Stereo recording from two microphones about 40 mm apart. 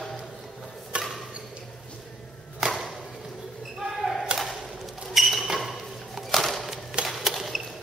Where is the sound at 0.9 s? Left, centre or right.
Right.